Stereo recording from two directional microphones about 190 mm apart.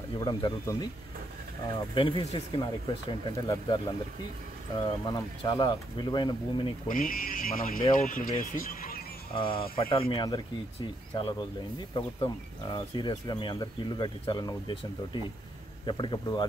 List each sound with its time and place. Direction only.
0.2 s speech: 20° left (ahead or behind)
2.0 s speech: 30° left (ahead or behind)
5.0 s speech: 20° left (ahead or behind)
6.9 s speech: 45° left (ahead or behind)
9.3 s speech: 30° left (ahead or behind)
15.8 s speech: 25° left (ahead or behind)